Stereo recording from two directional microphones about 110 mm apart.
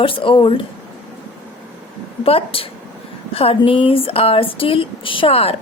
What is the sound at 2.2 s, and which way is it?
A woman's voice, 60° left (ahead or behind).